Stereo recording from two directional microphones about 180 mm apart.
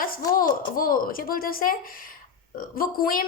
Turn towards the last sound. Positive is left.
turn(degrees=55)  # may be behind; listen again after turning